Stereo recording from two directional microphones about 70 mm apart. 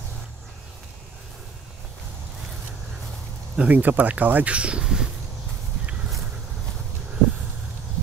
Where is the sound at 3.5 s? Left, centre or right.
Right.